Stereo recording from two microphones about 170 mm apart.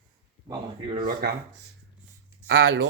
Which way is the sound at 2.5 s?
90° right.